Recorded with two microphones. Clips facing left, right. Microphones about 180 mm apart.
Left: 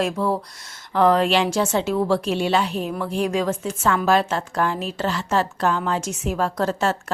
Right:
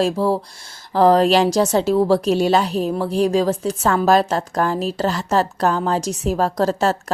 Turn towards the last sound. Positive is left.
turn(degrees=-35)  # may be behind; listen again after turning